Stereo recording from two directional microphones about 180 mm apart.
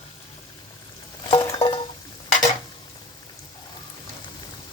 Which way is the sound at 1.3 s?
25° left (ahead or behind).